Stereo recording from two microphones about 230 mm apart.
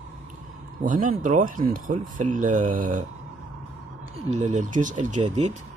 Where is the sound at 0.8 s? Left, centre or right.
Right.